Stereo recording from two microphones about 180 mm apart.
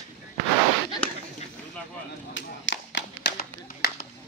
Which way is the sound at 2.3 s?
90° left.